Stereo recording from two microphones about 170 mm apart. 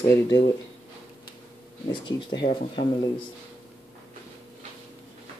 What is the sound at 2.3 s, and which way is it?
Speech, 30° left (ahead or behind).